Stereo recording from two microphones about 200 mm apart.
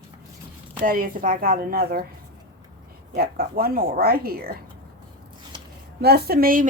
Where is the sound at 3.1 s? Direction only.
50° right (ahead or behind).